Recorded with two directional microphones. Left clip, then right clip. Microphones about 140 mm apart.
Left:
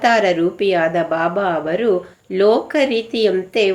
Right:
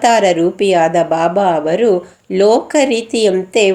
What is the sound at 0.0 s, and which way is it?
A woman's voice, 40° right (ahead or behind).